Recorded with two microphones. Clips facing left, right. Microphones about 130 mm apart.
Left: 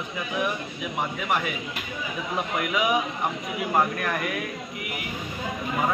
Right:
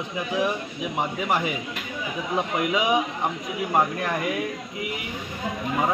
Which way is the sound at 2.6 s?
20° right (ahead or behind).